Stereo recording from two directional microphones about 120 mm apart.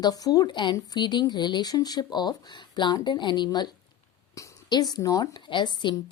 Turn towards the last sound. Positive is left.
turn(degrees=40)  # may be behind; listen again after turning